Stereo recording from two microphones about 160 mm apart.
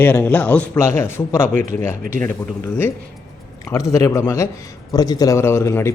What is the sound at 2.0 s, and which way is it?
Speech, 60° right (ahead or behind).